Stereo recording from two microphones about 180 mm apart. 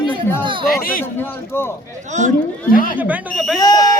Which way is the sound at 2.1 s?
40° right (ahead or behind).